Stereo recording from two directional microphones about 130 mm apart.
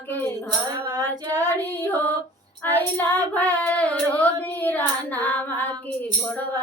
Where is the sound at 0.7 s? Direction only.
30° right (ahead or behind).